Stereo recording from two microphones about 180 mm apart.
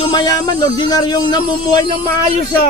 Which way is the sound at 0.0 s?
25° left (ahead or behind).